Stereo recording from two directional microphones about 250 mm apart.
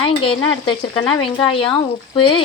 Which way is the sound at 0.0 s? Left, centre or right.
Left.